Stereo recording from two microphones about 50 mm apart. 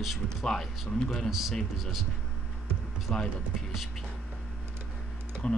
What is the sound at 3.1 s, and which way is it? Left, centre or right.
Speech, centre.